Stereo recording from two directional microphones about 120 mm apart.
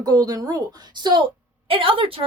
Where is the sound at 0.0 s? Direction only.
30° right (ahead or behind).